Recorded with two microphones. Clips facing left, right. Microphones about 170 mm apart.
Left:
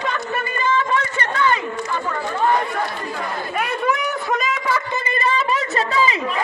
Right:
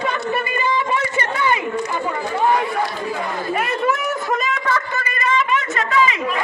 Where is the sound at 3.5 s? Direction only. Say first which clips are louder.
Even; centre (ahead or behind).